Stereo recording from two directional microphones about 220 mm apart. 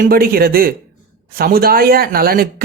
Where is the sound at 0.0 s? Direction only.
40° right (ahead or behind).